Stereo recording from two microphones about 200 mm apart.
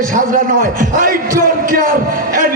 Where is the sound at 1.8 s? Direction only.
45° right (ahead or behind).